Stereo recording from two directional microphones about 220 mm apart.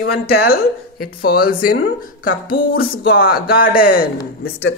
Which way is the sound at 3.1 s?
40° left (ahead or behind).